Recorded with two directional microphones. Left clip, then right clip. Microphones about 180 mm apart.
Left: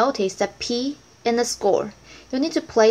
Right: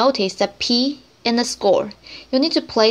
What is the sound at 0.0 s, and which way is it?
Speech, 25° right (ahead or behind).